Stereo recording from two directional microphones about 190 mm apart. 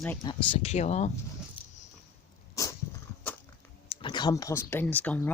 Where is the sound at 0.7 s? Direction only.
35° left (ahead or behind).